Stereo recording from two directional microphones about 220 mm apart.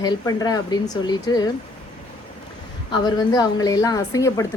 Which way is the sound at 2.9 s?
20° left (ahead or behind).